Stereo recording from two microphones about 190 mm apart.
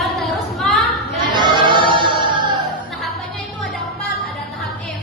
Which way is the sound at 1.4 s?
25° right (ahead or behind).